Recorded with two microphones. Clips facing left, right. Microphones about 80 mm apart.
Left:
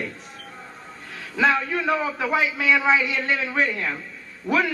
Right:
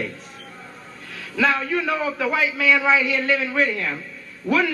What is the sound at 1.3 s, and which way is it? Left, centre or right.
A man's voice, left.